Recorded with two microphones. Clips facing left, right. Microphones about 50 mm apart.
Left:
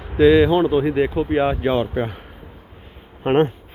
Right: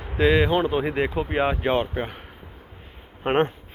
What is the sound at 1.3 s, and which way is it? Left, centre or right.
Speech, right.